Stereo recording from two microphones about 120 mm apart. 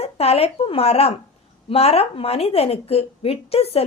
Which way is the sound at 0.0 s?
55° left (ahead or behind).